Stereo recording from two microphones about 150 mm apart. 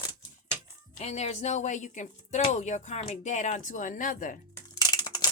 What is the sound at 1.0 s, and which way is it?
Speech, 45° left (ahead or behind).